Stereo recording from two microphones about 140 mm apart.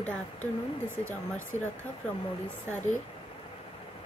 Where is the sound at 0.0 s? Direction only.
10° left (ahead or behind).